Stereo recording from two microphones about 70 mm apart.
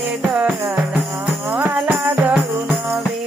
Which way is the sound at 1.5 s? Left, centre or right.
Right.